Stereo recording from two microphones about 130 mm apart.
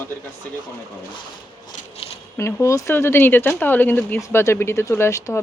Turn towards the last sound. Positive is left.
turn(degrees=25)  # may be behind; listen again after turning